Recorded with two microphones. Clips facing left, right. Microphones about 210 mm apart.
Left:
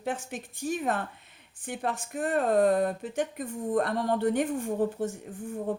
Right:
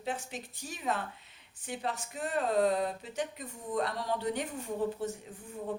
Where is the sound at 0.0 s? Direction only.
50° left (ahead or behind).